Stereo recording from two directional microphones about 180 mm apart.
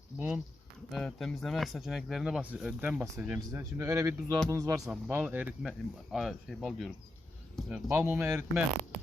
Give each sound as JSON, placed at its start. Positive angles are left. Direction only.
{"t": 0.9, "sound": "speech", "side_deg": 0}